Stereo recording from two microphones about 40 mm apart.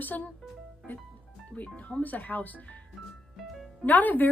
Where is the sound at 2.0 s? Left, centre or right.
Left.